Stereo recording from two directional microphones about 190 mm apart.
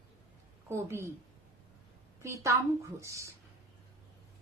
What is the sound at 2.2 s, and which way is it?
A child's voice, 15° right (ahead or behind).